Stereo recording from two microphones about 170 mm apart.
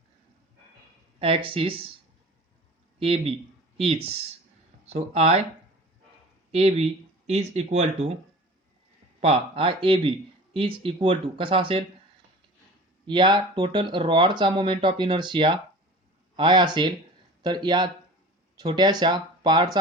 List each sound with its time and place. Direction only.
1.2 s speech: 35° right (ahead or behind)
3.0 s speech: 35° right (ahead or behind)
6.5 s speech: 35° right (ahead or behind)
9.2 s speech: 35° right (ahead or behind)
13.1 s speech: 30° right (ahead or behind)